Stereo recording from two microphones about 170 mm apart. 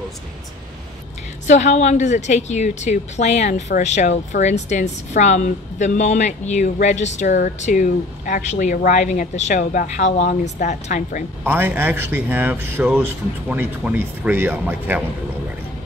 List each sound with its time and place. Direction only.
1.5 s a woman's voice: 45° left (ahead or behind)
11.4 s speech: 10° right (ahead or behind)